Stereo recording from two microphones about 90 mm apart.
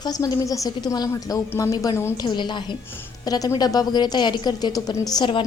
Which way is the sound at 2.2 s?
55° left (ahead or behind).